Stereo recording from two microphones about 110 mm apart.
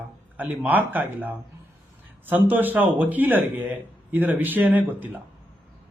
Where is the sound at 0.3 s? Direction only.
15° right (ahead or behind).